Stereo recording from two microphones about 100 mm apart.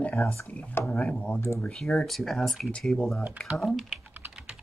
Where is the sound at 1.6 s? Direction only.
5° left (ahead or behind).